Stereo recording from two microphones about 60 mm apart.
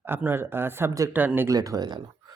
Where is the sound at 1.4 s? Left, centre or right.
Right.